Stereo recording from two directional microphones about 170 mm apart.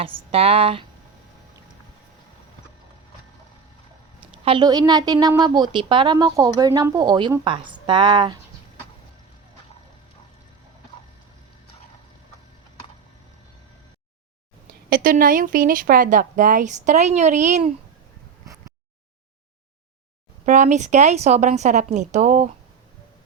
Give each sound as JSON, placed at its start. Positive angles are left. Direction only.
{"t": 0.0, "sound": "speech", "side_deg": -35}
{"t": 4.2, "sound": "a woman's voice", "side_deg": -30}
{"t": 14.7, "sound": "speech", "side_deg": -60}
{"t": 20.4, "sound": "speech", "side_deg": -45}